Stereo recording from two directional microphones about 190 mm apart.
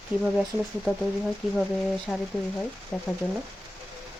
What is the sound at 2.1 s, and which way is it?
Speech, centre (ahead or behind).